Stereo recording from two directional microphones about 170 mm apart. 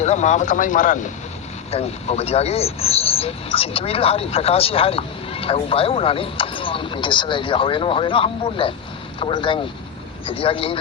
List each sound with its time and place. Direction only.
0.0 s speech: 40° left (ahead or behind)
1.7 s speech: 35° left (ahead or behind)